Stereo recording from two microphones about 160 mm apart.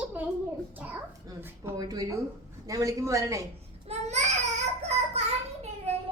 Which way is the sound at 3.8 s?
45° right (ahead or behind).